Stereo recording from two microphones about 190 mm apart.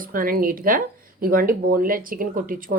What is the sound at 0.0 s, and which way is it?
Speech, 50° right (ahead or behind).